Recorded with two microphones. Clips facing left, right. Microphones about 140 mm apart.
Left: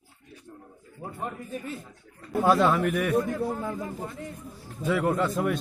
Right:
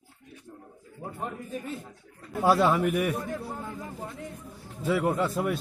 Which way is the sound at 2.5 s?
10° right (ahead or behind).